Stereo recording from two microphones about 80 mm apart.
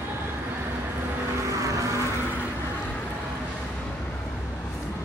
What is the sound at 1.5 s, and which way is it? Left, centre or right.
Vehicle, right.